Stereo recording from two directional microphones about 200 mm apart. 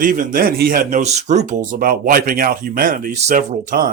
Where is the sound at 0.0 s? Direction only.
40° right (ahead or behind).